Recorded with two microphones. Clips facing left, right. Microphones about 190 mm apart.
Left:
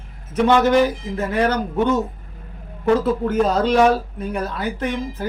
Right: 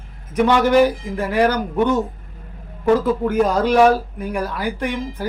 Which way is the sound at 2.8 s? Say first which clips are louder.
Right 1 dB; 10° right (ahead or behind).